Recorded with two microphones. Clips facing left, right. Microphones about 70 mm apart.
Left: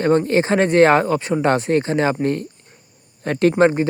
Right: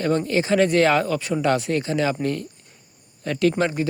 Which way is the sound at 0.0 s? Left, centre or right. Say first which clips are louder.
Left 5 dB; left.